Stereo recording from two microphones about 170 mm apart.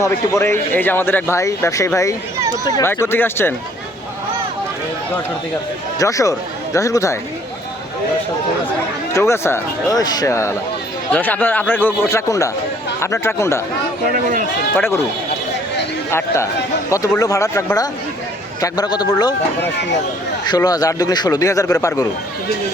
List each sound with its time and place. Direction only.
0.0 s speech: 15° left (ahead or behind)
6.0 s a man's voice: 20° left (ahead or behind)
9.1 s speech: 15° left (ahead or behind)
14.8 s speech: 15° left (ahead or behind)
16.1 s a man's voice: 15° left (ahead or behind)
20.4 s a man's voice: 25° left (ahead or behind)